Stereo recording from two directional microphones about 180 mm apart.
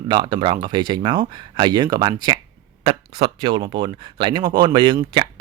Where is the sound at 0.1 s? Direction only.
25° right (ahead or behind).